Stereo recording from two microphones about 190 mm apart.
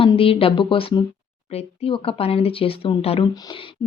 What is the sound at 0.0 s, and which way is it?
Speech, 30° left (ahead or behind).